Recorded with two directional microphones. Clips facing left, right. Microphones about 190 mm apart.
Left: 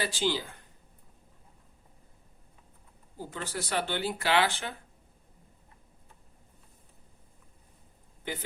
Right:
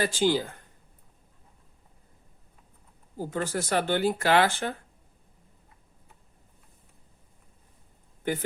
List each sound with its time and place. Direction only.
0.0 s speech: 50° right (ahead or behind)
3.3 s speech: 45° right (ahead or behind)
8.2 s speech: 50° right (ahead or behind)